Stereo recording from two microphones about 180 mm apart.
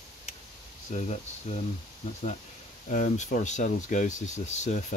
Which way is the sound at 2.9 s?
45° left (ahead or behind).